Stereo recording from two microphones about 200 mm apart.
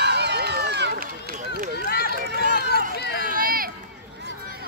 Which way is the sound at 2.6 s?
50° left (ahead or behind).